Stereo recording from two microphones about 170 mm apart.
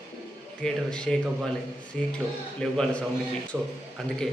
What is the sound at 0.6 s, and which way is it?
A man's voice, 5° left (ahead or behind).